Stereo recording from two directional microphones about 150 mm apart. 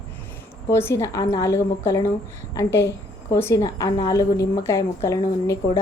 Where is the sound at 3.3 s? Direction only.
20° left (ahead or behind).